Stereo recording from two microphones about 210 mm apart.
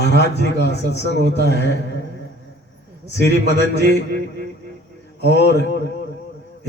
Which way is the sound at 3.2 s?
55° left (ahead or behind).